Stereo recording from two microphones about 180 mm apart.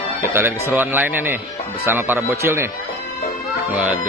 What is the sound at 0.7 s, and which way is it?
Speech, 10° right (ahead or behind).